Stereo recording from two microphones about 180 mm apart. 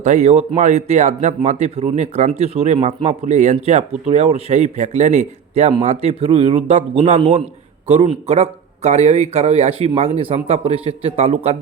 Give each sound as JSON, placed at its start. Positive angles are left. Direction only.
{"t": 0.0, "sound": "a man's voice", "side_deg": -40}